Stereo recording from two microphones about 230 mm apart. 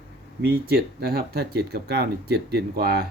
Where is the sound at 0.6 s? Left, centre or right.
Right.